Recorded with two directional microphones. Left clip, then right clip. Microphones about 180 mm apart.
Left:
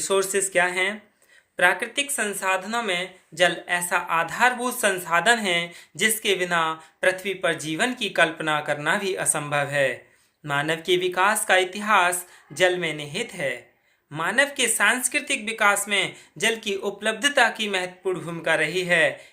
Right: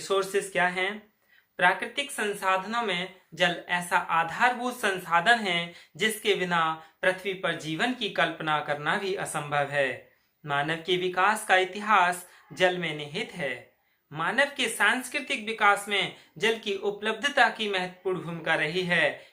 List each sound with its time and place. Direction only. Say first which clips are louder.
0.0 s speech: left 4 dB; 40° left (ahead or behind)